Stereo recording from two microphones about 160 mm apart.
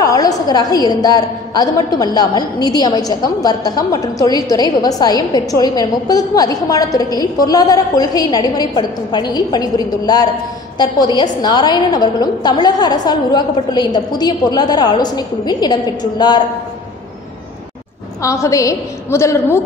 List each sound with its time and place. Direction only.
0.0 s a woman's voice: 20° left (ahead or behind)
18.2 s a woman's voice: 20° left (ahead or behind)